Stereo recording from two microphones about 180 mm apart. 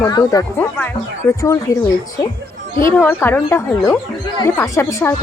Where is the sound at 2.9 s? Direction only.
15° left (ahead or behind).